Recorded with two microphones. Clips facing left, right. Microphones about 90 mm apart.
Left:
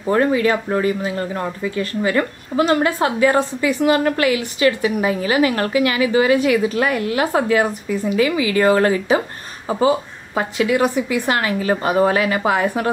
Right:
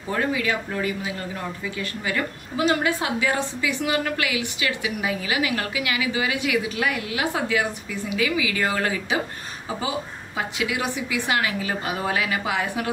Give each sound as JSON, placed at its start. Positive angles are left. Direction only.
{"t": 0.1, "sound": "a woman's voice", "side_deg": 40}